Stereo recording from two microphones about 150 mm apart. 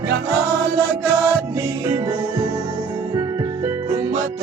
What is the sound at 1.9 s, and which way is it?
Music, 25° right (ahead or behind).